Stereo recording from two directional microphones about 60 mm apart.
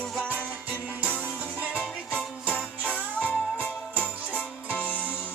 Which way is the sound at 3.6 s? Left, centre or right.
Left.